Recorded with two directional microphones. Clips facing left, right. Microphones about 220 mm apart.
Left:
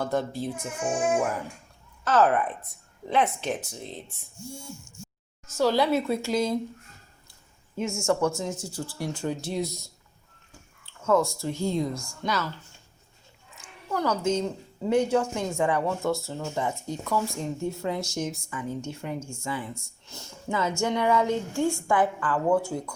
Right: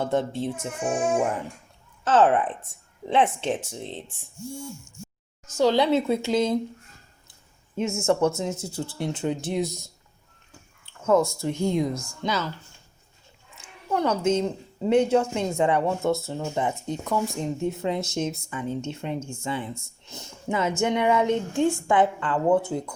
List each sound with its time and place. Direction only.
0.0 s a woman's voice: 25° right (ahead or behind)
2.0 s a woman's voice: 30° right (ahead or behind)
5.5 s a woman's voice: 20° right (ahead or behind)
8.0 s a woman's voice: 25° right (ahead or behind)
10.8 s a woman's voice: 20° right (ahead or behind)
13.9 s a woman's voice: 25° right (ahead or behind)